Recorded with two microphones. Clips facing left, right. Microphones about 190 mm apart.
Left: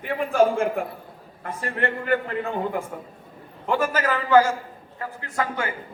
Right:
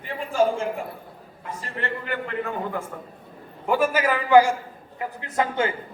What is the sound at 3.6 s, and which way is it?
A man's voice, 10° right (ahead or behind).